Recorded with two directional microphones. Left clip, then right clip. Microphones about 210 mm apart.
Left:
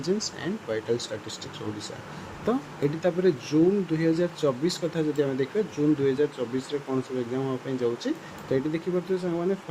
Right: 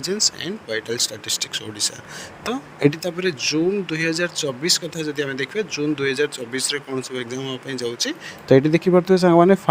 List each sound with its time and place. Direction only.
0.0 s speech: 50° right (ahead or behind)